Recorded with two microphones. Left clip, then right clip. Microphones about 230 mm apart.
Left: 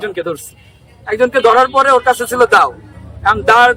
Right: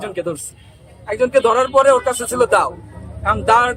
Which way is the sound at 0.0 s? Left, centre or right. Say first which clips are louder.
Left 4 dB; centre.